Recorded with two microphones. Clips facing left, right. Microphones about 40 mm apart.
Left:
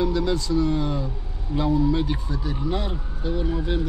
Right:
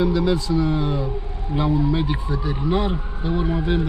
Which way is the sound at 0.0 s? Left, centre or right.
Centre.